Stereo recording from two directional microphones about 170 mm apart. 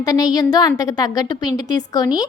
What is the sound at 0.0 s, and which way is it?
A woman's voice, 20° left (ahead or behind).